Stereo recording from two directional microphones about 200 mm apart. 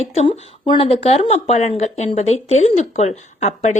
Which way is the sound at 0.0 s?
30° left (ahead or behind).